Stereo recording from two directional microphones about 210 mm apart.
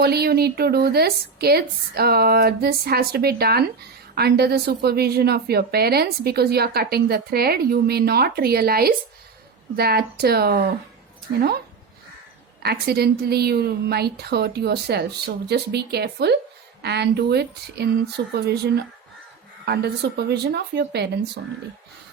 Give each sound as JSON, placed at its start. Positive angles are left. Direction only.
{"t": 0.0, "sound": "a woman's voice", "side_deg": -50}
{"t": 12.6, "sound": "a woman's voice", "side_deg": -50}